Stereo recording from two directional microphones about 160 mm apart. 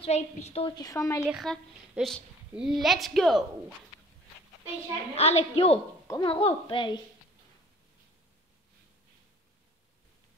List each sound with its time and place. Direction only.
0.0 s a woman's voice: 40° left (ahead or behind)
0.7 s a woman's voice: 20° left (ahead or behind)
1.3 s a woman's voice: centre (ahead or behind)
5.1 s a woman's voice: 40° left (ahead or behind)
6.0 s speech: 25° left (ahead or behind)
6.3 s a woman's voice: 35° left (ahead or behind)